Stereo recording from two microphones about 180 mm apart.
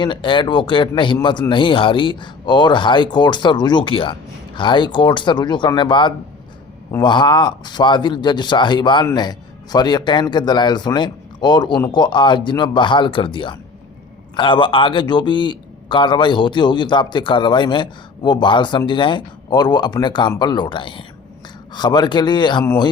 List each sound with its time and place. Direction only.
0.0 s a man's voice: 25° left (ahead or behind)